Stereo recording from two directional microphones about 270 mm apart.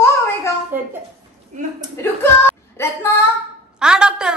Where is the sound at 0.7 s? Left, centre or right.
Centre.